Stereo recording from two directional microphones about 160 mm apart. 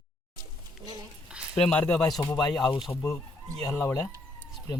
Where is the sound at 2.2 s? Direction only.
25° left (ahead or behind).